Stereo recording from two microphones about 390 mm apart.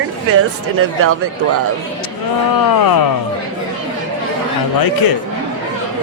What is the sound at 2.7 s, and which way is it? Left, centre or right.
Speech, left.